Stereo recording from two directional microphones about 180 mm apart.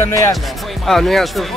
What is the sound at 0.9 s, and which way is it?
Speech, centre (ahead or behind).